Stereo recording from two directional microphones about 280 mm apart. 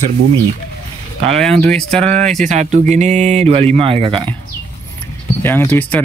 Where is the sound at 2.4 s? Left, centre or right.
Right.